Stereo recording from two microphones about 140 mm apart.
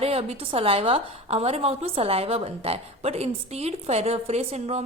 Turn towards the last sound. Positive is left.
turn(degrees=-50)  # may be behind; listen again after turning